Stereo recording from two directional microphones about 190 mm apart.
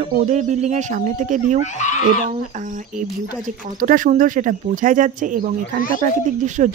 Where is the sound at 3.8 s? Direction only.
45° right (ahead or behind).